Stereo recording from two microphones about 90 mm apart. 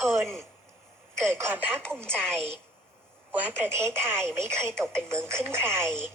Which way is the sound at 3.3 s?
25° right (ahead or behind).